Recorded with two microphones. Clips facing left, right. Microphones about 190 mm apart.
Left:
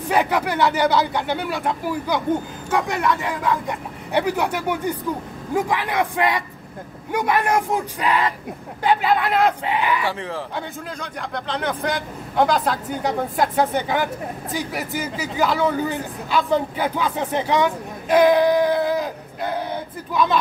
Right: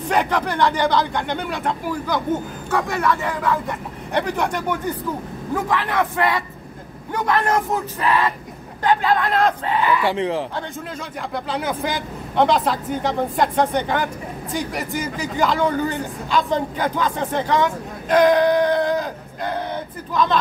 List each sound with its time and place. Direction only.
0.1 s speech: 5° left (ahead or behind)
10.0 s speech: 20° right (ahead or behind)
11.0 s speech: 5° right (ahead or behind)